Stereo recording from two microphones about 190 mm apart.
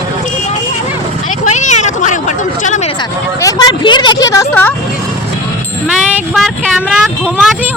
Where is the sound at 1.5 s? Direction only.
40° left (ahead or behind).